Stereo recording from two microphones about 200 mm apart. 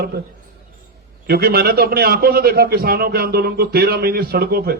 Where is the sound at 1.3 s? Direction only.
50° right (ahead or behind).